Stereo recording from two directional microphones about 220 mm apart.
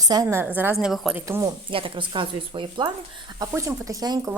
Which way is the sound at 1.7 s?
25° right (ahead or behind).